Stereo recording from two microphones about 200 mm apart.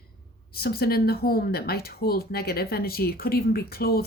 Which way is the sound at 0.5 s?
50° left (ahead or behind).